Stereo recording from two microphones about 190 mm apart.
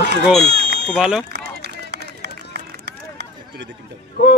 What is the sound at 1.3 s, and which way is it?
Run, 60° right (ahead or behind).